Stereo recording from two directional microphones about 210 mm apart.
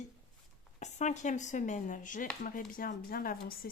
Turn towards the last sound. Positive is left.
turn(degrees=45)  # may be behind; listen again after turning